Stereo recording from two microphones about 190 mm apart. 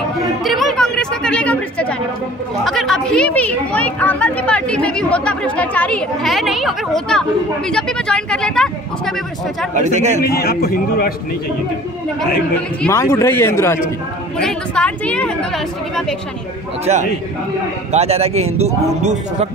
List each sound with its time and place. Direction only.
0.4 s speech: centre (ahead or behind)
9.8 s speech: 40° right (ahead or behind)
10.2 s a man's voice: 55° left (ahead or behind)
12.8 s speech: 15° left (ahead or behind)
16.8 s speech: 40° right (ahead or behind)